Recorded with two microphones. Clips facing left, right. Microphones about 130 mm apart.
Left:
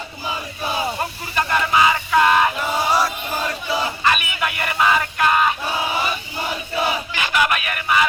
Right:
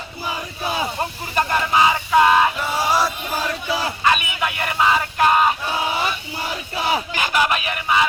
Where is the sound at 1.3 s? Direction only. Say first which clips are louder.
Even; 35° right (ahead or behind).